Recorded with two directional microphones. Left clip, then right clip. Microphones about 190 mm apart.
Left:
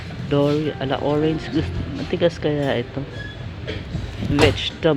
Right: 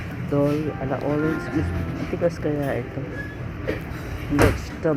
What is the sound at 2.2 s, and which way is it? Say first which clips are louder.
Speech: left 4 dB; 80° left.